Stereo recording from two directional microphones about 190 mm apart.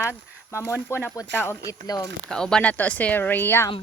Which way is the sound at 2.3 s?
5° left (ahead or behind).